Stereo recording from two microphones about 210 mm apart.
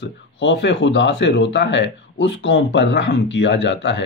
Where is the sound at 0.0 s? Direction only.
60° left (ahead or behind).